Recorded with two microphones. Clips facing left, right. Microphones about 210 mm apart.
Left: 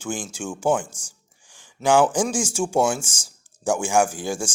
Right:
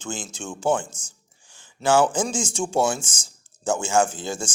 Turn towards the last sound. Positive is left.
turn(degrees=10)  # may be behind; listen again after turning